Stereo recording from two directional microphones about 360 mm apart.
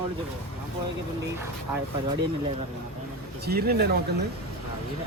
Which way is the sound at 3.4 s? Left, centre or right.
Right.